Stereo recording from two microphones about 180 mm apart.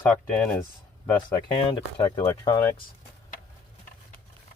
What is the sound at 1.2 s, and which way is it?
Speech, 25° left (ahead or behind).